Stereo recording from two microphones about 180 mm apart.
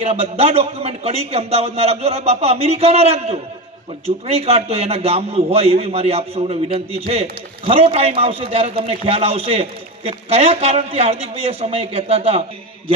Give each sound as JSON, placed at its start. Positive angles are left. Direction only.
{"t": 0.0, "sound": "a man's voice", "side_deg": -35}